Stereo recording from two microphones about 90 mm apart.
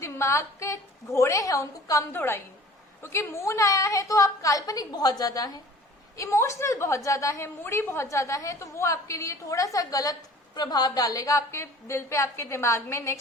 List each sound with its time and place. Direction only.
0.0 s a woman's voice: 30° left (ahead or behind)
2.1 s a woman's voice: 25° left (ahead or behind)